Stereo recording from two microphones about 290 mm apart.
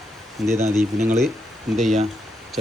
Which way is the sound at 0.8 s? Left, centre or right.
Right.